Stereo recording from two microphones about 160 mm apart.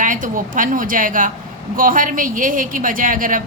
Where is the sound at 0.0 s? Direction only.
55° right (ahead or behind).